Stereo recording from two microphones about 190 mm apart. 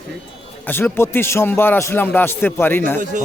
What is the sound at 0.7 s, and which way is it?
A man's voice, 10° left (ahead or behind).